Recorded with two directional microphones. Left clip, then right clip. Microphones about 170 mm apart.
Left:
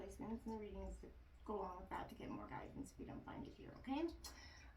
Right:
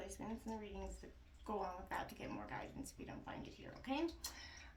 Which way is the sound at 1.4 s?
35° right (ahead or behind).